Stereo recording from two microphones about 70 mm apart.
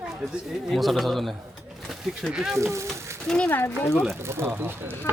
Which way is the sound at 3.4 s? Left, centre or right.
Left.